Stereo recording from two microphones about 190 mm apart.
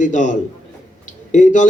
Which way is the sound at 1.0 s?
40° left (ahead or behind).